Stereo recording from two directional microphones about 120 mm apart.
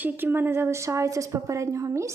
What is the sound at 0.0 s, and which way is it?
A woman's voice, 20° right (ahead or behind).